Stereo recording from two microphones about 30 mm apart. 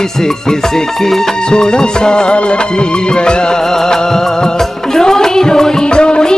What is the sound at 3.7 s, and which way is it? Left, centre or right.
Music of bollywood, centre.